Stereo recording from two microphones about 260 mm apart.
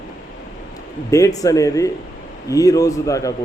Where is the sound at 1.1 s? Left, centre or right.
Centre.